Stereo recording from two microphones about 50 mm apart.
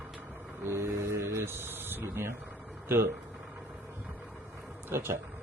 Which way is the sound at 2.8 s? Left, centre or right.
Right.